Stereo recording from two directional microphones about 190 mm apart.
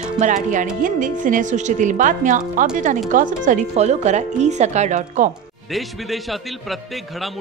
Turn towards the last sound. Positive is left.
turn(degrees=0)  # may be behind; listen again after turning